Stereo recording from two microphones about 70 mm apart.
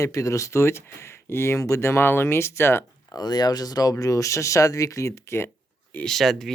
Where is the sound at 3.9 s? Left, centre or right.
Left.